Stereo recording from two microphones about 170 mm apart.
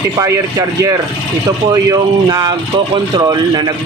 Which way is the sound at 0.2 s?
20° right (ahead or behind).